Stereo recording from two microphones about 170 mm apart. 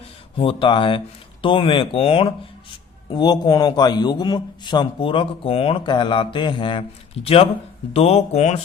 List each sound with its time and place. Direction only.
0.3 s a man's voice: 30° left (ahead or behind)